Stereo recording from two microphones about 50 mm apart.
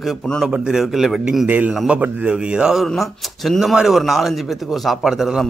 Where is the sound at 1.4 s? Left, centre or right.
Right.